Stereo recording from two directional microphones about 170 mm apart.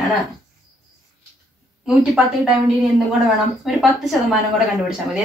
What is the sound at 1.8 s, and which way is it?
A woman's voice, centre (ahead or behind).